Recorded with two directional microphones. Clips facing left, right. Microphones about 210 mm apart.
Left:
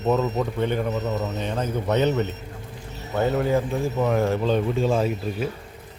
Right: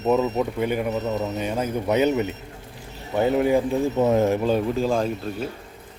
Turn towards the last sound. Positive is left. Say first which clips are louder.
# left 1 dB
turn(degrees=5)  # may be behind; listen again after turning